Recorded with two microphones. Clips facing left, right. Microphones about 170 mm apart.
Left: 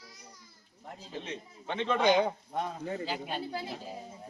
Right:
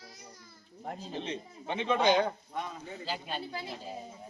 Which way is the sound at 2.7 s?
75° left (ahead or behind).